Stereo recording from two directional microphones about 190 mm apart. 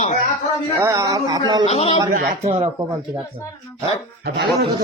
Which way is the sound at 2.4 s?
35° right (ahead or behind).